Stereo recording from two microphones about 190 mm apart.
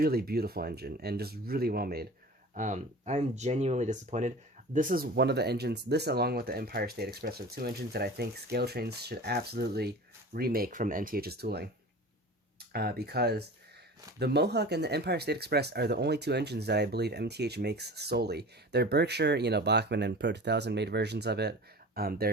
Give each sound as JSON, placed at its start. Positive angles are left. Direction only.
{"t": 0.0, "sound": "speech", "side_deg": -55}
{"t": 2.6, "sound": "speech", "side_deg": -40}